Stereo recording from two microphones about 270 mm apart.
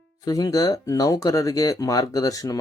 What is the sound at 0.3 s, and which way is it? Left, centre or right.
Speech, centre.